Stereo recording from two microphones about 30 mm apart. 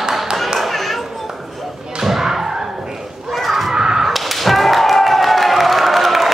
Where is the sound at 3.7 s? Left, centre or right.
Centre.